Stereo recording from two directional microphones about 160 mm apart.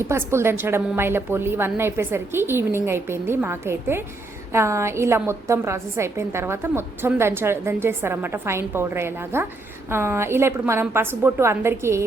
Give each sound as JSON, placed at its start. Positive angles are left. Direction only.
{"t": 0.0, "sound": "a woman's voice", "side_deg": -15}